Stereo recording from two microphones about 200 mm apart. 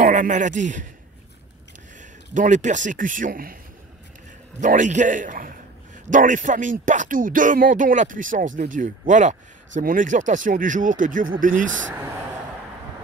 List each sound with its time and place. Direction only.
0.0 s speech: 40° right (ahead or behind)
2.3 s speech: 40° right (ahead or behind)
4.6 s speech: 40° right (ahead or behind)